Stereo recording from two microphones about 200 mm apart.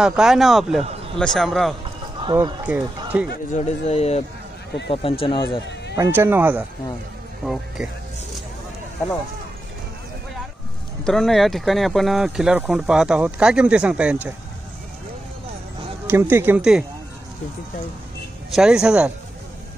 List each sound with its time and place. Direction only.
0.0 s speech: 5° right (ahead or behind)
2.3 s speech: 10° right (ahead or behind)
3.5 s speech: 35° left (ahead or behind)
5.9 s speech: 10° right (ahead or behind)
11.1 s speech: centre (ahead or behind)
16.1 s speech: 10° right (ahead or behind)
18.5 s speech: 5° right (ahead or behind)